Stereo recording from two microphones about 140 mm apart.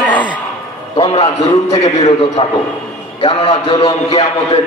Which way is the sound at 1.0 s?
45° left (ahead or behind).